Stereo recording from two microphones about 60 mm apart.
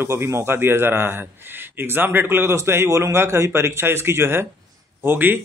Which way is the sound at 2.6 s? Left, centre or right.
Right.